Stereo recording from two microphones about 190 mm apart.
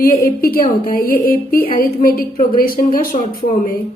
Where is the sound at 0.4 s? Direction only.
50° left (ahead or behind).